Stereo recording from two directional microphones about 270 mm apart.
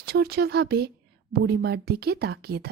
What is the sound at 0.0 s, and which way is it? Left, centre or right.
A woman's voice, right.